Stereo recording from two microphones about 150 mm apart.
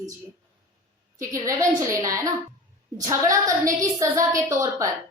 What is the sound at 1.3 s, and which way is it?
A woman's voice, 20° right (ahead or behind).